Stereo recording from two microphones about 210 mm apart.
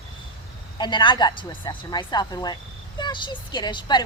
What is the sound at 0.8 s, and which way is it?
A woman's voice, 20° left (ahead or behind).